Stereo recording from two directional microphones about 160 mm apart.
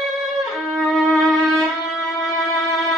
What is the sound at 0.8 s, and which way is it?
Violin, centre (ahead or behind).